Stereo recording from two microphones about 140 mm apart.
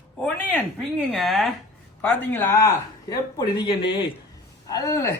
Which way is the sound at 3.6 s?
30° left (ahead or behind).